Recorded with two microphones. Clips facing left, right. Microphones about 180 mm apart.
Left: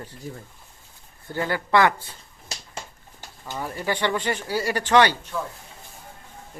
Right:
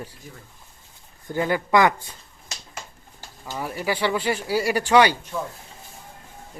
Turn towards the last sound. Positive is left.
turn(degrees=-10)  # may be behind; listen again after turning